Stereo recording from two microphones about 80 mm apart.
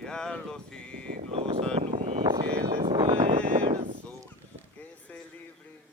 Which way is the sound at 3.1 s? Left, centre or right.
Right.